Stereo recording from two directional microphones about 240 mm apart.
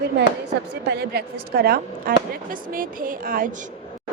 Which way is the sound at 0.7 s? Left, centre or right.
Right.